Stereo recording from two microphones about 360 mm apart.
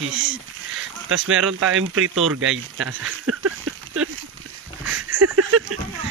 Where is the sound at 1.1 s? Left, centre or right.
Right.